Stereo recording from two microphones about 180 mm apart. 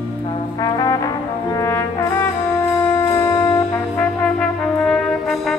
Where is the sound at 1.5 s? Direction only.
15° left (ahead or behind).